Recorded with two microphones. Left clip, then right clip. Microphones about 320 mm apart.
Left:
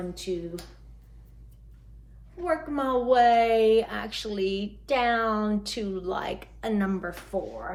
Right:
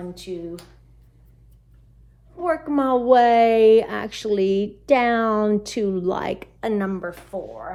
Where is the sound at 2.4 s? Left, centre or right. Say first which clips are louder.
Right 6 dB; right.